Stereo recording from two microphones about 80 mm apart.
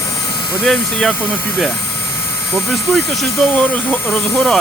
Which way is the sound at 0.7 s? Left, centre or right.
Centre.